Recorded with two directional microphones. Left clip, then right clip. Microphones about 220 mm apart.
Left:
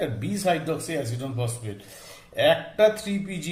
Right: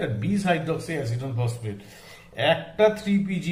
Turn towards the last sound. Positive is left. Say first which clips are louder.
# right 4 dB
turn(degrees=50)  # may be behind; listen again after turning